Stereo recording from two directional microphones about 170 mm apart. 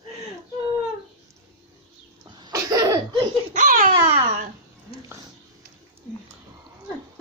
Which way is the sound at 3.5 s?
50° right (ahead or behind).